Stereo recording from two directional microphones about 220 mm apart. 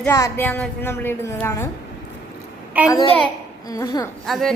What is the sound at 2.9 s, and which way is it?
A woman's voice, 20° left (ahead or behind).